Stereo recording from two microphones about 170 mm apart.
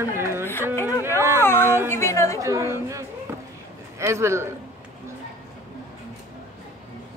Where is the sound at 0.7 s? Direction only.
20° left (ahead or behind).